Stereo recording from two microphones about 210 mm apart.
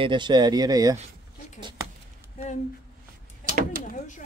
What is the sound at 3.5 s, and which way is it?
Door, 40° right (ahead or behind).